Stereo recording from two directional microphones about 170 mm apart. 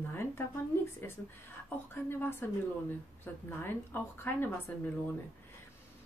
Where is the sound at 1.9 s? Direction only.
15° left (ahead or behind).